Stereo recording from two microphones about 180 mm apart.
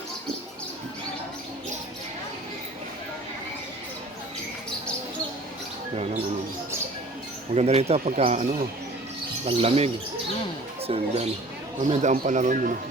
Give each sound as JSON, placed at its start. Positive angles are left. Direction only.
{"t": 7.5, "sound": "speech", "side_deg": -35}